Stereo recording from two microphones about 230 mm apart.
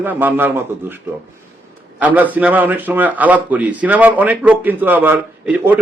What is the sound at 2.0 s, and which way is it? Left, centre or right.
A man's voice, centre.